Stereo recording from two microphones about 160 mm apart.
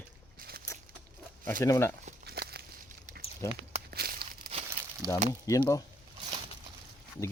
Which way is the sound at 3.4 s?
15° left (ahead or behind).